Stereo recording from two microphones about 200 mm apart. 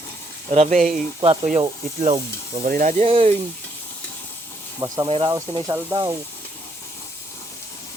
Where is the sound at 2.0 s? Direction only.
35° right (ahead or behind).